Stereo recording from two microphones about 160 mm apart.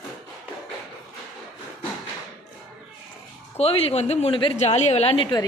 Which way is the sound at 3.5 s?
40° left (ahead or behind).